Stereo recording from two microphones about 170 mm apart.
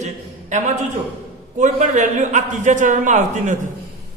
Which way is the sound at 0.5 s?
45° right (ahead or behind).